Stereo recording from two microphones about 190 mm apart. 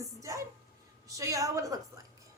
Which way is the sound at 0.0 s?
15° right (ahead or behind).